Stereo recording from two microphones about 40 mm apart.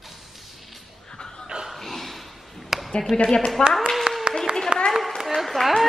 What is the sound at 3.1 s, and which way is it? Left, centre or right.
Speech, centre.